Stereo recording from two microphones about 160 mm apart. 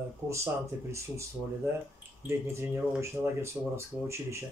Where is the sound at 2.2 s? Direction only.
15° right (ahead or behind).